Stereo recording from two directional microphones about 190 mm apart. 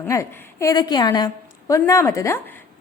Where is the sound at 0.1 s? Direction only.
15° left (ahead or behind).